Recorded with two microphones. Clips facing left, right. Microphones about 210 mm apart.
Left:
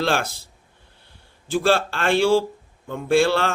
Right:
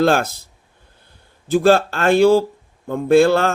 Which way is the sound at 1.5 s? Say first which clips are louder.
Right 6 dB; 45° right (ahead or behind).